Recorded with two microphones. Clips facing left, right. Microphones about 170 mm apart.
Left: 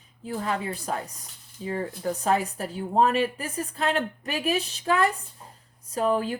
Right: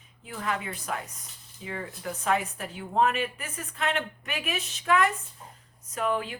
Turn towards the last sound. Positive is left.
turn(degrees=35)  # may be behind; listen again after turning